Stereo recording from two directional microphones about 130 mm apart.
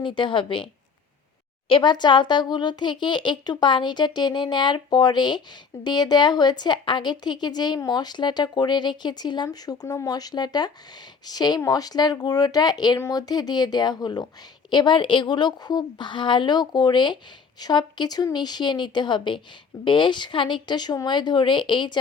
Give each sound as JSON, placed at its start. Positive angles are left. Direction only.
{"t": 0.0, "sound": "a woman's voice", "side_deg": 40}